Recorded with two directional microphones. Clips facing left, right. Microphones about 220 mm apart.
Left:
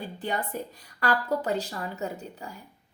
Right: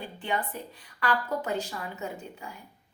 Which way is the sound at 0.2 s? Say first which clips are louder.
Left 1 dB; 40° left (ahead or behind).